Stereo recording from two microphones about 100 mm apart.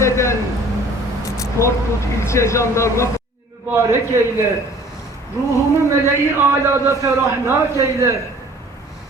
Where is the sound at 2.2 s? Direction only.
30° left (ahead or behind).